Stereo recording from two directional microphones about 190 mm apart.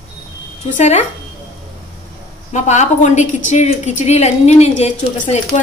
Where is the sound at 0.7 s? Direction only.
35° left (ahead or behind).